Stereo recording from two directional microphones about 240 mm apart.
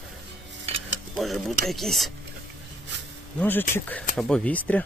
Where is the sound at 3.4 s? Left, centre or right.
Centre.